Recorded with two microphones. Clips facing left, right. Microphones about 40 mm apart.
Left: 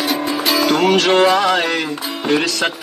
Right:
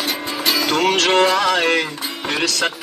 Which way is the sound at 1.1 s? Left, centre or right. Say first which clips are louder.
Left 2 dB; left.